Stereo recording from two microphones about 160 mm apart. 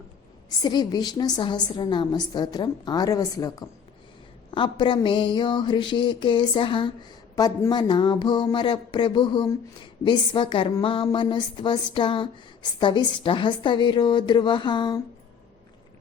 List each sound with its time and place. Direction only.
0.6 s a woman's voice: 25° left (ahead or behind)